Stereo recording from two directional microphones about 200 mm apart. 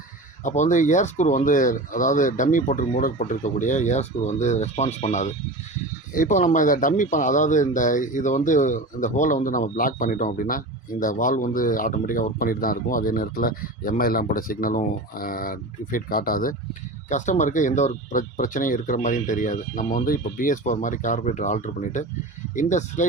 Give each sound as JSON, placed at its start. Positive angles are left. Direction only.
{"t": 0.4, "sound": "speech", "side_deg": 40}